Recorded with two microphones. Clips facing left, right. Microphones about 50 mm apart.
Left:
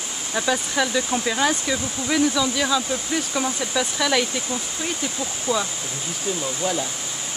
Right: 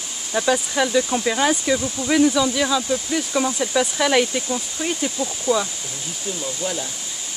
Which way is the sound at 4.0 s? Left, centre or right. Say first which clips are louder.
Right 3 dB; centre.